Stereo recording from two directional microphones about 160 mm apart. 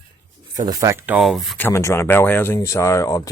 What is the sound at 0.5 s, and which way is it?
Speech, 25° right (ahead or behind).